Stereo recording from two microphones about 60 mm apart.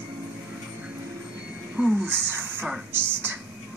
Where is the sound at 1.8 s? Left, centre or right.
Right.